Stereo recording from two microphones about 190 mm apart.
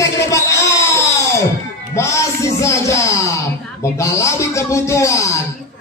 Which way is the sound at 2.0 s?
15° left (ahead or behind).